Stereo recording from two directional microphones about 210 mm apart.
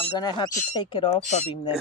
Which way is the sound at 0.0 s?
20° left (ahead or behind).